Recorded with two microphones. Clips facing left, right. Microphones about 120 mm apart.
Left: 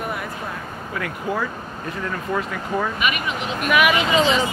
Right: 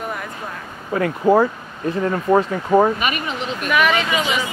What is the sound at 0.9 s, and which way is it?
Speech, 35° right (ahead or behind).